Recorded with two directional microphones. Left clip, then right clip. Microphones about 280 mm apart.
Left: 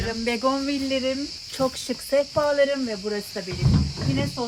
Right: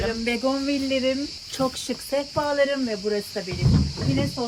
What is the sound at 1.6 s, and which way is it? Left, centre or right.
Speech, centre.